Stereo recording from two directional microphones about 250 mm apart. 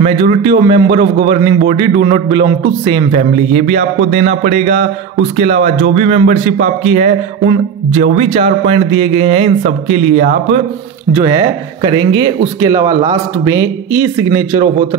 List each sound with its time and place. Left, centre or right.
0.0 s a man's voice: right
5.9 s a man's voice: right
11.1 s speech: centre